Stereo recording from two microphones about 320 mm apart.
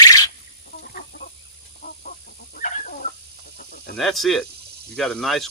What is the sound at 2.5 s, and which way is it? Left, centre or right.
Dog, left.